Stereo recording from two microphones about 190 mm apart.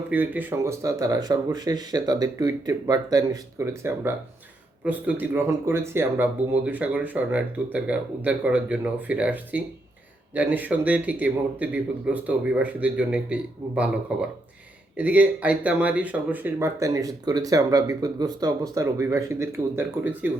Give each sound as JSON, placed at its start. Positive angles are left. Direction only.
{"t": 0.1, "sound": "speech", "side_deg": -10}